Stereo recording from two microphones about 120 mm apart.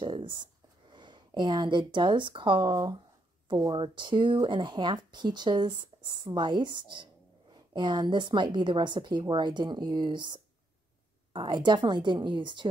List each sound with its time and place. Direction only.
0.0 s a woman's voice: 45° right (ahead or behind)